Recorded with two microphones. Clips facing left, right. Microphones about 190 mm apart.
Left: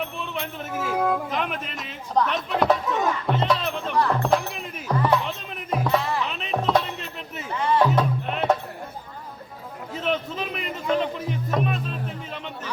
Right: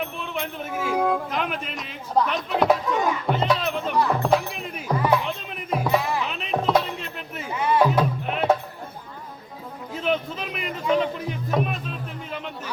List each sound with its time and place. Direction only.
0.0 s music: 5° right (ahead or behind)
9.9 s music: centre (ahead or behind)